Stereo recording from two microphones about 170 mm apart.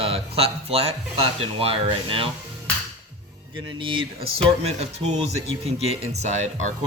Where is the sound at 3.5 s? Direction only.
30° right (ahead or behind).